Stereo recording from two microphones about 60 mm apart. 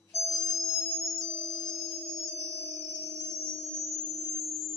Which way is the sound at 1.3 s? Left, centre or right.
Centre.